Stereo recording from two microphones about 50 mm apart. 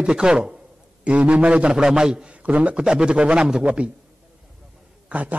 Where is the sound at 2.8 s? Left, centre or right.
Centre.